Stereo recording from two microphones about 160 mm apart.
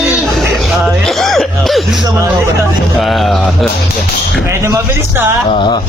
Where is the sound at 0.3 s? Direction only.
Centre (ahead or behind).